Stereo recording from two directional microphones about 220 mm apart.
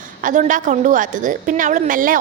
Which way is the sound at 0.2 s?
35° right (ahead or behind).